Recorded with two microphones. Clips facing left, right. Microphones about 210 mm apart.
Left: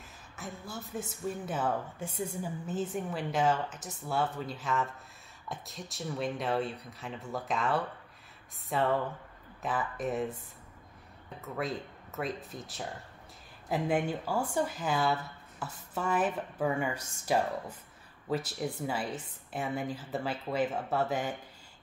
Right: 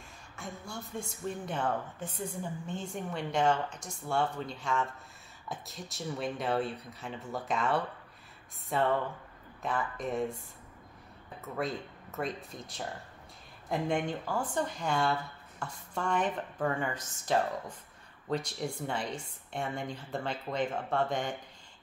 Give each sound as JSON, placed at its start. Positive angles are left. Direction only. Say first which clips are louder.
{"t": 0.4, "sound": "a woman's voice", "louder": "even", "side_deg": 5}
{"t": 11.4, "sound": "a woman's voice", "louder": "even", "side_deg": 0}